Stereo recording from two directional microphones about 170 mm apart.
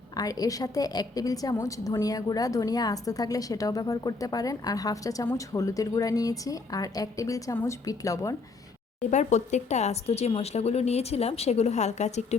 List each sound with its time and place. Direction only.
0.1 s a woman's voice: 20° left (ahead or behind)
9.0 s speech: 45° left (ahead or behind)